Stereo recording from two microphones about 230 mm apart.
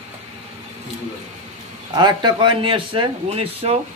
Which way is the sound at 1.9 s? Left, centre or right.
Centre.